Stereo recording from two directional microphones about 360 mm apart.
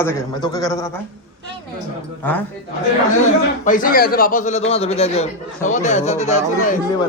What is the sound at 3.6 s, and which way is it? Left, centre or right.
A man's voice, left.